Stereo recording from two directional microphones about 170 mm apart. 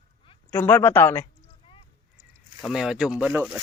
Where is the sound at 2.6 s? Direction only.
5° right (ahead or behind).